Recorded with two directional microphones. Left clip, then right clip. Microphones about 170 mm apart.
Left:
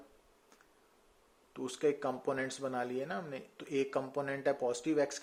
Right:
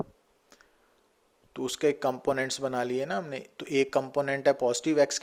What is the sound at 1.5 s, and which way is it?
Speech, 45° right (ahead or behind).